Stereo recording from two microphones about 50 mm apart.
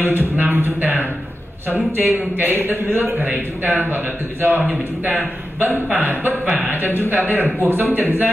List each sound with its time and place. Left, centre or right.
0.0 s a man's voice: right
3.2 s a man's voice: right
4.6 s a man's voice: right
5.9 s a man's voice: right